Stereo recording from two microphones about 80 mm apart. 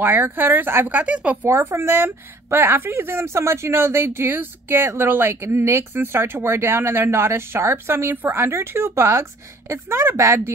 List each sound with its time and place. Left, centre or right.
0.0 s speech: right
1.5 s speech: right